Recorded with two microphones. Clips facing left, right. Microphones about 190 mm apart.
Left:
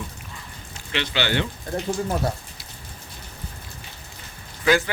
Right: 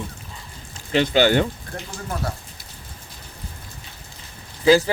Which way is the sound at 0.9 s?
45° right (ahead or behind).